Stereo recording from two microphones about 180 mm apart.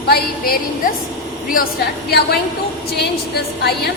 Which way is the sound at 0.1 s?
55° left (ahead or behind).